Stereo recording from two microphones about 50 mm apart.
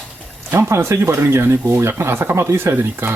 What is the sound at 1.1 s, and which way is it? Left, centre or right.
Speech, right.